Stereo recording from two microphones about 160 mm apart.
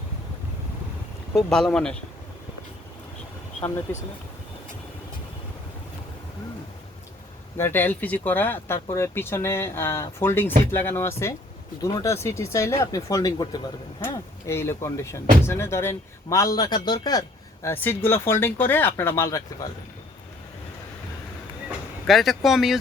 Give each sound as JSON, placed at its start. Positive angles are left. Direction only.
{"t": 1.5, "sound": "speech", "side_deg": 5}
{"t": 7.5, "sound": "a man's voice", "side_deg": 15}
{"t": 22.0, "sound": "speech", "side_deg": 0}